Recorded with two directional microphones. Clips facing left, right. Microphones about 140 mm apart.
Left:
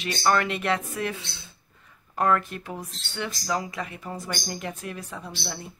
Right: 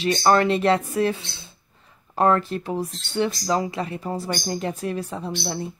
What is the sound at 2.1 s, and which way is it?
Speech, 30° right (ahead or behind).